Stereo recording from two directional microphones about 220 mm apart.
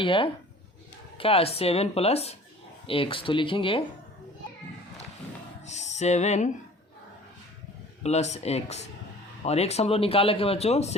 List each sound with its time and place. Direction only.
0.0 s speech: 25° left (ahead or behind)
5.6 s music: 30° left (ahead or behind)
8.0 s speech: 30° left (ahead or behind)